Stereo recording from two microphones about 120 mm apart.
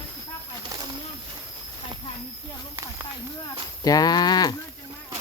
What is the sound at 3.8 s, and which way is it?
Speech, 30° left (ahead or behind).